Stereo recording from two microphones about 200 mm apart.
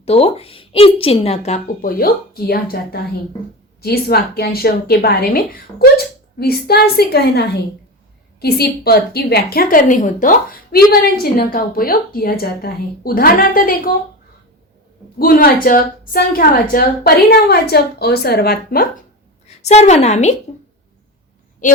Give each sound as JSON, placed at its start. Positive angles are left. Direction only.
{"t": 0.0, "sound": "a woman's voice", "side_deg": 30}
{"t": 1.9, "sound": "a woman's voice", "side_deg": 50}
{"t": 15.2, "sound": "a woman's voice", "side_deg": 45}
{"t": 19.6, "sound": "a woman's voice", "side_deg": 35}